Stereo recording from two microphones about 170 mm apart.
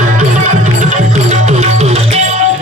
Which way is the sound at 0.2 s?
45° right (ahead or behind).